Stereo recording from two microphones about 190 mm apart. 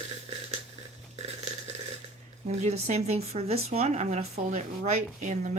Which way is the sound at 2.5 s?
35° right (ahead or behind).